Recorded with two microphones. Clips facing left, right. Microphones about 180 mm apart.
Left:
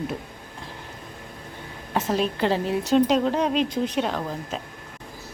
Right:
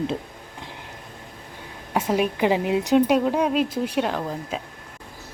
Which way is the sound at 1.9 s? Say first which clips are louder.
Right 2 dB; 15° right (ahead or behind).